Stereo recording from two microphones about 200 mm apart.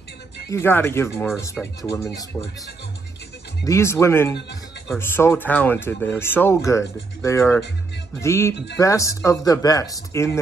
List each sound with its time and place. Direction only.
0.5 s speech: 10° left (ahead or behind)
3.6 s speech: 15° left (ahead or behind)